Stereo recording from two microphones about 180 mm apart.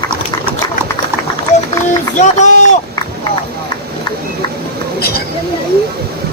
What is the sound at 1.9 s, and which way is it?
Run, 40° left (ahead or behind).